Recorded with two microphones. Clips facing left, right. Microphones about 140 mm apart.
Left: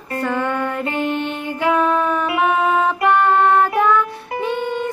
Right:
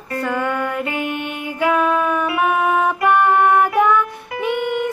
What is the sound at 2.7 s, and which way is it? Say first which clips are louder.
Music: even; 15° right (ahead or behind).